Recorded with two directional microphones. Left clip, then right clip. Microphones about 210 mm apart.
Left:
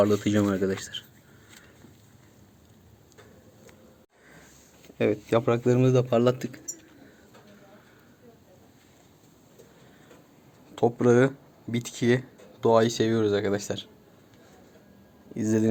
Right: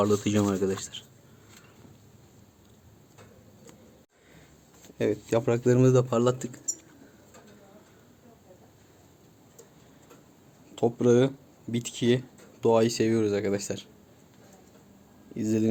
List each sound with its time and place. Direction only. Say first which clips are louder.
0.0 s speech: left 2 dB; centre (ahead or behind)
4.9 s speech: left 2 dB; centre (ahead or behind)
10.8 s speech: left 2 dB; centre (ahead or behind)
15.4 s speech: left 2 dB; centre (ahead or behind)